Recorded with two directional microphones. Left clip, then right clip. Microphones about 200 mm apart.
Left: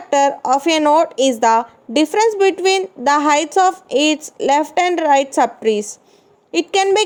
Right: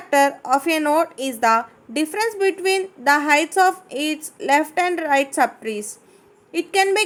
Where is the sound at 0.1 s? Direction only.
35° left (ahead or behind).